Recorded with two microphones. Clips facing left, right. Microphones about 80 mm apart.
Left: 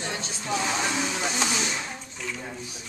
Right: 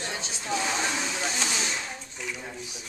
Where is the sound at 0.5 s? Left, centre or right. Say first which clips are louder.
Left 1 dB; centre.